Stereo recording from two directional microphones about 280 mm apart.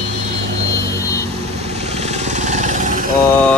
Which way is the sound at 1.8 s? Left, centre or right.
Right.